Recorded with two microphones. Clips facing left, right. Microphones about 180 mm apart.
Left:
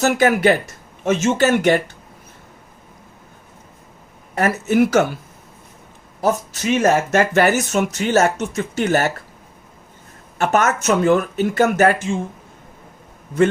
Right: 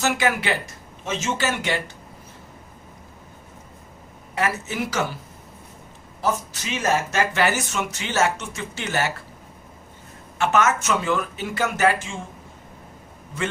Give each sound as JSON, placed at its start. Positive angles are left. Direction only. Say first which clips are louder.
{"t": 0.0, "sound": "speech", "louder": "left 8 dB", "side_deg": 45}
{"t": 4.4, "sound": "speech", "louder": "left 9 dB", "side_deg": 50}
{"t": 6.2, "sound": "speech", "louder": "left 7 dB", "side_deg": 50}
{"t": 10.3, "sound": "speech", "louder": "left 3 dB", "side_deg": 45}
{"t": 11.0, "sound": "speech", "louder": "left 9 dB", "side_deg": 55}